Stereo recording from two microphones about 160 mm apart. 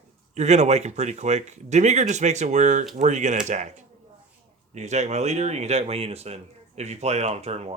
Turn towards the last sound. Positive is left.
turn(degrees=-40)  # may be behind; listen again after turning